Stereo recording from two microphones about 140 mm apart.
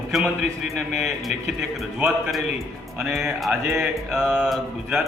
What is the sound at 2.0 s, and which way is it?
A man's voice, 5° right (ahead or behind).